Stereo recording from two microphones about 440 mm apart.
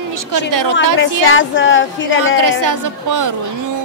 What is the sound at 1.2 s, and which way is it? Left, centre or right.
A woman's voice, left.